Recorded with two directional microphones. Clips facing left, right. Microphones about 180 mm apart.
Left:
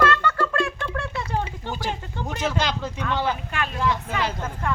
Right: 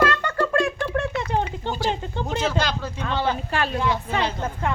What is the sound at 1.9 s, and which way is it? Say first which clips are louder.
Speech: right 4 dB; 20° right (ahead or behind).